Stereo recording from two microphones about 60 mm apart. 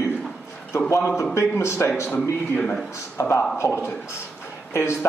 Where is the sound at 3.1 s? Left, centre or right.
Left.